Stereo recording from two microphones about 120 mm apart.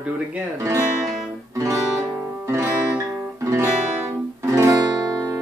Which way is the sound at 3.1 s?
25° right (ahead or behind).